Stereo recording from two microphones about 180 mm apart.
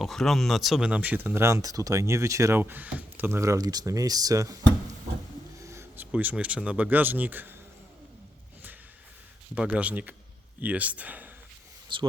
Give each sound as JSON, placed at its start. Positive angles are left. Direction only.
{"t": 0.0, "sound": "speech", "side_deg": 0}
{"t": 5.6, "sound": "speech", "side_deg": -15}
{"t": 9.6, "sound": "speech", "side_deg": -5}
{"t": 11.9, "sound": "speech", "side_deg": -25}